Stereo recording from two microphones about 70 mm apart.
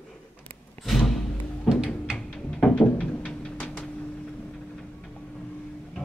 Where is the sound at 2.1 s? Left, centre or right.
Centre.